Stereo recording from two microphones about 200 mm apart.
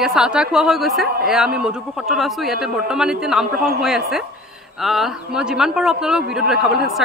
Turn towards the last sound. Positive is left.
turn(degrees=0)  # may be behind; listen again after turning